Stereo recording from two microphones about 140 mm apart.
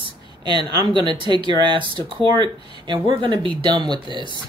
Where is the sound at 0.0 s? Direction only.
35° right (ahead or behind).